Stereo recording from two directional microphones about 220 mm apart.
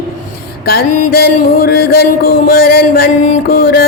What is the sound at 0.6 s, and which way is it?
Music, 45° left (ahead or behind).